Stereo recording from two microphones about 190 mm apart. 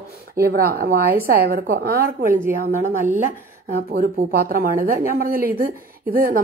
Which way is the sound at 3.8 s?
50° right (ahead or behind).